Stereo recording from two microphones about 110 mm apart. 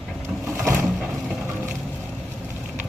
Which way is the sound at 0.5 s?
20° right (ahead or behind).